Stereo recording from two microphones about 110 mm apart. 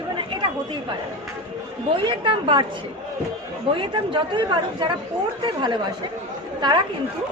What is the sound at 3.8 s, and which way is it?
Speech, 50° right (ahead or behind).